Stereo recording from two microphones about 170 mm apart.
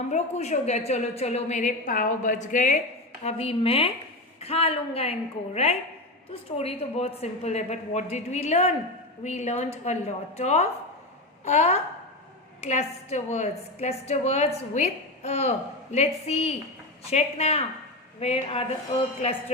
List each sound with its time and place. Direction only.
0.1 s a woman's voice: 40° left (ahead or behind)
3.2 s a woman's voice: 40° left (ahead or behind)
6.3 s a woman's voice: 35° left (ahead or behind)